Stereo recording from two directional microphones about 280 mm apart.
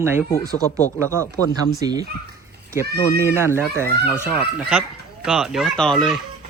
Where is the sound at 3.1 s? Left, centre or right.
Centre.